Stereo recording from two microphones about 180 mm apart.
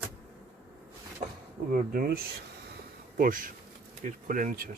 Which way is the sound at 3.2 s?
50° right (ahead or behind).